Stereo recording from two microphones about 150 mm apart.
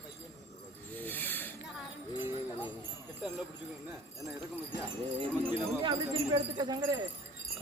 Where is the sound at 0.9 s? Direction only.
10° left (ahead or behind).